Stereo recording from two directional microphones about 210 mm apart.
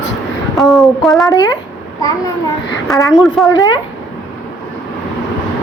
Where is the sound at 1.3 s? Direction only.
15° left (ahead or behind).